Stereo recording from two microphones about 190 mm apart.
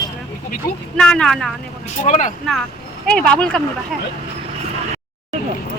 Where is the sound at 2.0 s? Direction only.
40° left (ahead or behind).